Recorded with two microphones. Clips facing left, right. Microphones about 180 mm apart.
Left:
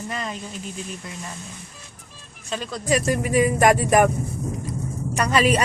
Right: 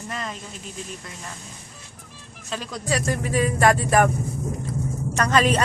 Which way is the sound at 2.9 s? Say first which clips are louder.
Left 4 dB; 15° left (ahead or behind).